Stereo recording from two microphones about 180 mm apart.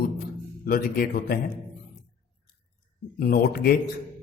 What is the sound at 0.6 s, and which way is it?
Speech, 55° left (ahead or behind).